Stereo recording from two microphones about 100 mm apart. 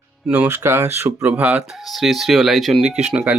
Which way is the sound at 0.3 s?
15° right (ahead or behind).